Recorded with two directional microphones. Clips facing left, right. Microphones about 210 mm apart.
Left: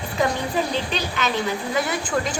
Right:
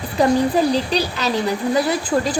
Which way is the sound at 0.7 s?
35° right (ahead or behind).